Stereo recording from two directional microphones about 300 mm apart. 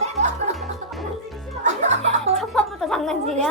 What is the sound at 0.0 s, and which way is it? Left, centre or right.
Music, right.